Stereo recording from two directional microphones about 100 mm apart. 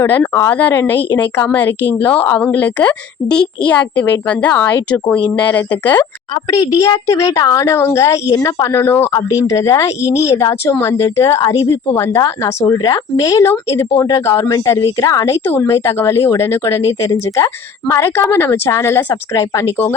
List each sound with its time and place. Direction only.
0.0 s a woman's voice: 20° left (ahead or behind)
6.5 s a woman's voice: 35° left (ahead or behind)
15.4 s a woman's voice: 25° left (ahead or behind)